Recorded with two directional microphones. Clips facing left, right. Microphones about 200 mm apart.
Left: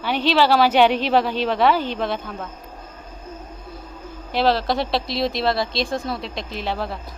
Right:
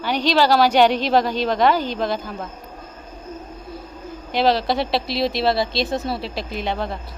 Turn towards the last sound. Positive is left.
turn(degrees=5)  # may be behind; listen again after turning